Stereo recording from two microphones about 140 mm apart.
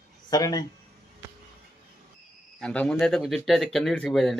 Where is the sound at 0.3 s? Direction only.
25° left (ahead or behind).